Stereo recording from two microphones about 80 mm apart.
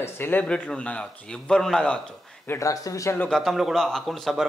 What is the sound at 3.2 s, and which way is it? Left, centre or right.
A man's voice, centre.